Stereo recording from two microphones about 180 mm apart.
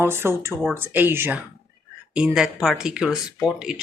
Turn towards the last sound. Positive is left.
turn(degrees=-5)  # may be behind; listen again after turning